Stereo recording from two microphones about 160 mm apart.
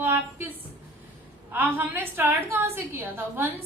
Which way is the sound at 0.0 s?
15° right (ahead or behind).